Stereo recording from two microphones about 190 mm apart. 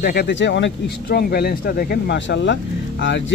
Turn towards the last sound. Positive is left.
turn(degrees=70)  # may be behind; listen again after turning